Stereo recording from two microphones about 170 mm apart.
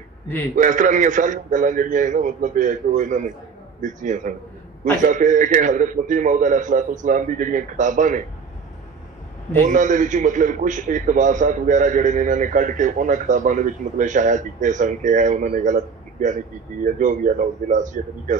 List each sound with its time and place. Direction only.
0.6 s a man's voice: 50° right (ahead or behind)
9.6 s a man's voice: 50° right (ahead or behind)